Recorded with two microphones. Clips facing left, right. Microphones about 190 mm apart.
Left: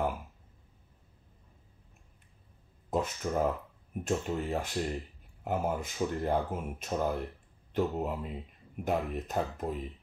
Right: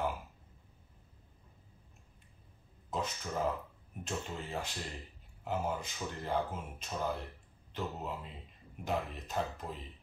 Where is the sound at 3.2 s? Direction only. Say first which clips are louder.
Left 5 dB; 55° left (ahead or behind).